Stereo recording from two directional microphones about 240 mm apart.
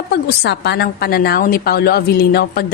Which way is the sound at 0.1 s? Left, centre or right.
Left.